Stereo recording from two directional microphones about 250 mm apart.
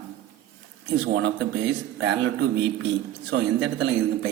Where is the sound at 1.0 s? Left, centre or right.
Right.